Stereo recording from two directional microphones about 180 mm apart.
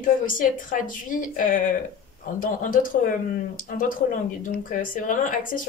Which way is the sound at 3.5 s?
50° left (ahead or behind).